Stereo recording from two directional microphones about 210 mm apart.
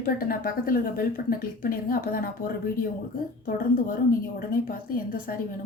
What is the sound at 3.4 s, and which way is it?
A woman's voice, 40° left (ahead or behind).